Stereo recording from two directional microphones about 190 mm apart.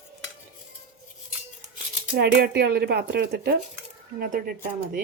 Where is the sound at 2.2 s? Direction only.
55° right (ahead or behind).